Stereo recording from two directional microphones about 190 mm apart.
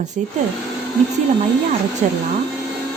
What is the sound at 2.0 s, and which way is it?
Speech, 40° right (ahead or behind).